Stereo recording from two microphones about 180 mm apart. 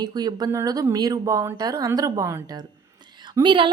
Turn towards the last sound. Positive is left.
turn(degrees=-25)  # may be behind; listen again after turning